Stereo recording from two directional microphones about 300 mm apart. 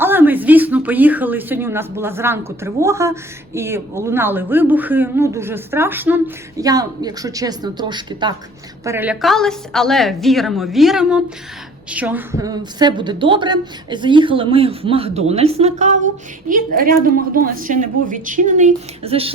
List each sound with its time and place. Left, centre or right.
0.0 s a woman's voice: centre